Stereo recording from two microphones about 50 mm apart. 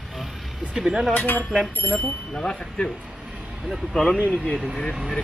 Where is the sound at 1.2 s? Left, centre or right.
Left.